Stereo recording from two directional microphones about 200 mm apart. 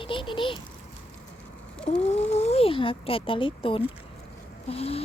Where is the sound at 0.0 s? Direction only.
25° left (ahead or behind).